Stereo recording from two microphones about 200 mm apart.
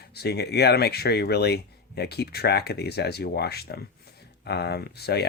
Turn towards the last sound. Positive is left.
turn(degrees=55)  # may be behind; listen again after turning